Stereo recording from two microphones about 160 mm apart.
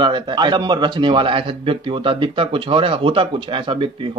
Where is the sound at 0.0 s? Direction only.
30° right (ahead or behind).